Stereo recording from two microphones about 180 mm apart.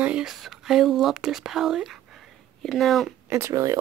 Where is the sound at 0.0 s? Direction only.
5° right (ahead or behind).